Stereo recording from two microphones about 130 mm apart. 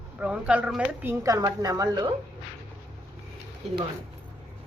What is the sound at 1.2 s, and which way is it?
Speech, 25° right (ahead or behind).